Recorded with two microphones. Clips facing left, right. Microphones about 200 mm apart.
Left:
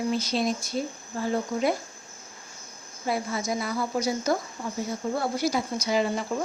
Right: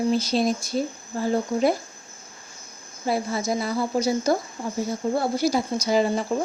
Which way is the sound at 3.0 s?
30° right (ahead or behind).